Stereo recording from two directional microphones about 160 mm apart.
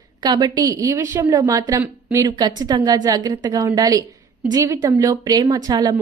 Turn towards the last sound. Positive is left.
turn(degrees=-25)  # may be behind; listen again after turning